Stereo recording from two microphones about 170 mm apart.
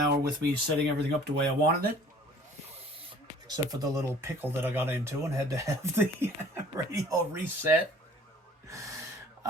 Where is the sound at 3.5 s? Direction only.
25° right (ahead or behind).